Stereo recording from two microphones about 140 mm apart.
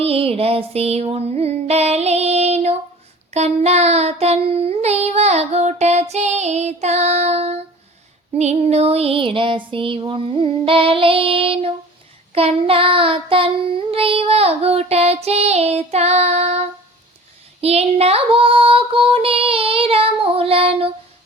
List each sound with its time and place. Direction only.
0.0 s child singing: 45° right (ahead or behind)
8.4 s female singing: 50° right (ahead or behind)
12.3 s child singing: 45° right (ahead or behind)
17.6 s female singing: 50° right (ahead or behind)